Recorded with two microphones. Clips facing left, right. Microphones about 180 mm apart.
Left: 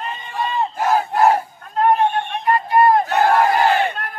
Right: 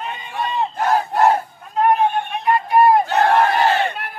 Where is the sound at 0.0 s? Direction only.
Centre (ahead or behind).